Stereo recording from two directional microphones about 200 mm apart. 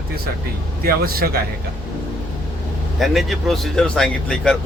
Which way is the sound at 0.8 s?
50° right (ahead or behind).